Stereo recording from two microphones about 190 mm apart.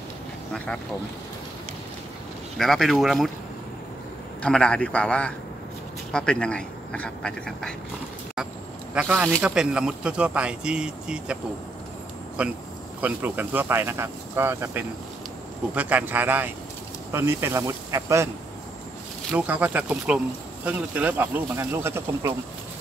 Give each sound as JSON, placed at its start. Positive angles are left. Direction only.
{"t": 2.5, "sound": "speech", "side_deg": 0}
{"t": 4.4, "sound": "speech", "side_deg": 5}
{"t": 8.9, "sound": "speech", "side_deg": -5}
{"t": 12.4, "sound": "speech", "side_deg": -5}
{"t": 19.3, "sound": "speech", "side_deg": -10}